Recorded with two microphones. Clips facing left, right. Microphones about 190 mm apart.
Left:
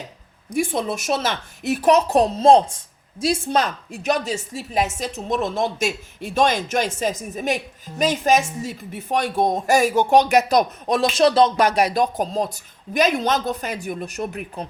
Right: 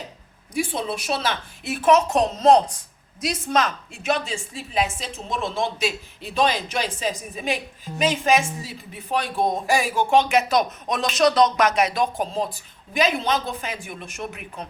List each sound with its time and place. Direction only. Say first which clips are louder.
0.5 s a woman's voice: left 3 dB; 50° left (ahead or behind)